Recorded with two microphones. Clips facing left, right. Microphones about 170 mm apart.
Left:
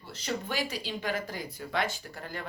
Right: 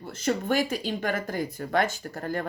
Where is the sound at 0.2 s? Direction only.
50° right (ahead or behind).